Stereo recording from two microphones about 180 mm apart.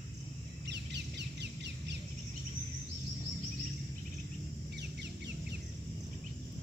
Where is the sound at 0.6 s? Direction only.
70° right (ahead or behind).